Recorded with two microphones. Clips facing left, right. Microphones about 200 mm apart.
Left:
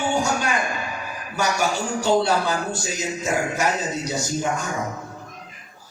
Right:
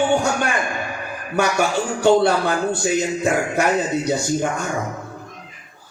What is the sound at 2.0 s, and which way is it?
Music, 60° right (ahead or behind).